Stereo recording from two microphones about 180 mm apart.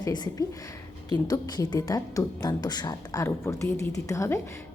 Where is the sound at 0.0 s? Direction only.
20° left (ahead or behind).